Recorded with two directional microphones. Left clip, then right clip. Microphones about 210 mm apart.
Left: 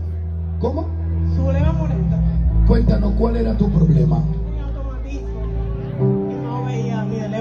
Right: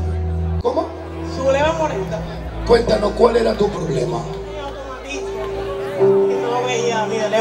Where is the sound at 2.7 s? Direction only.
15° right (ahead or behind).